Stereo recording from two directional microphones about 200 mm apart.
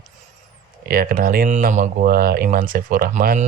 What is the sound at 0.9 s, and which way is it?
Speech, 45° right (ahead or behind).